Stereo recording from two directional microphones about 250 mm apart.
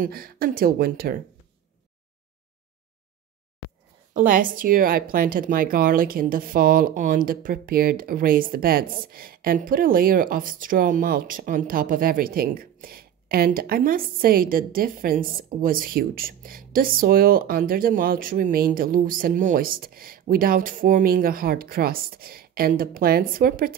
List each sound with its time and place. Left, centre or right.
0.0 s speech: right
4.1 s speech: right